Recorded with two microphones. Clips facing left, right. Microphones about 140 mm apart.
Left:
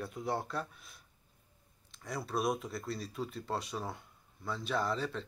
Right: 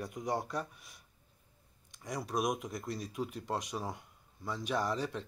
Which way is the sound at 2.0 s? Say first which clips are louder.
Even; 15° right (ahead or behind).